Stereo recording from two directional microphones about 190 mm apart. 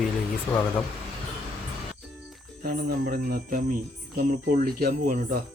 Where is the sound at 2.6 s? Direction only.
50° right (ahead or behind).